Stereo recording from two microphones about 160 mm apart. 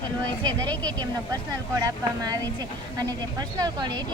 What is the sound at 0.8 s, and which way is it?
Speech, 25° right (ahead or behind).